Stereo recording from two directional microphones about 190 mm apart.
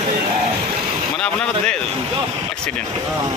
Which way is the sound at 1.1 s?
5° left (ahead or behind).